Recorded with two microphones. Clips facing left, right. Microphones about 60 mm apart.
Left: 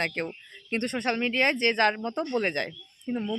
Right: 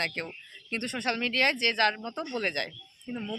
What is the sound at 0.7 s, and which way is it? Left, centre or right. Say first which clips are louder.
Speech: left 5 dB; left.